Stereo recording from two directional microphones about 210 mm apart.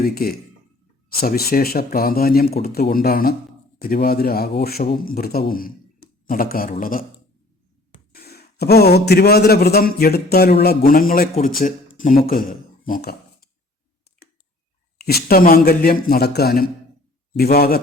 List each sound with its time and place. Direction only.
0.0 s speech: 45° left (ahead or behind)
8.1 s speech: 50° left (ahead or behind)
15.0 s speech: 45° left (ahead or behind)